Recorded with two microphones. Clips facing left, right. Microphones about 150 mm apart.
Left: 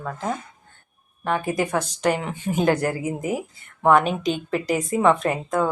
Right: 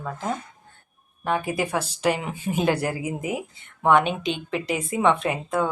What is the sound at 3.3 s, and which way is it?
Speech, centre (ahead or behind).